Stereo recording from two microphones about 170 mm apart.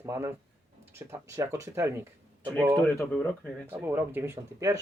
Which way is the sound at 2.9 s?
5° left (ahead or behind).